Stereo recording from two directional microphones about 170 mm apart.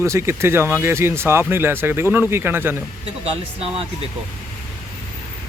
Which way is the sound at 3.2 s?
35° right (ahead or behind).